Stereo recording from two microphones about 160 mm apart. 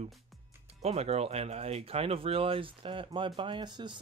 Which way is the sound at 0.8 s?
40° right (ahead or behind).